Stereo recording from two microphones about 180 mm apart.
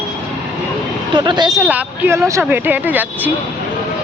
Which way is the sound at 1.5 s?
10° right (ahead or behind).